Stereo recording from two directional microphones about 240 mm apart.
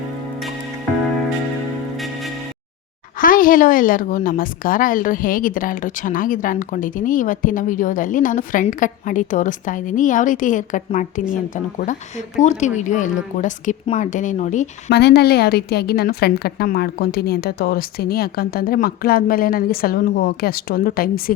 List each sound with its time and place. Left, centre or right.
3.2 s a woman's voice: left
14.8 s a woman's voice: left